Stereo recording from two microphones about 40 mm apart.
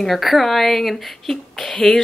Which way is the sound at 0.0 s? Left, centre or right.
Centre.